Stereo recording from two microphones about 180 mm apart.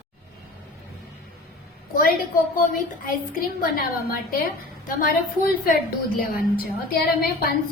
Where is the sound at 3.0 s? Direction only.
55° left (ahead or behind).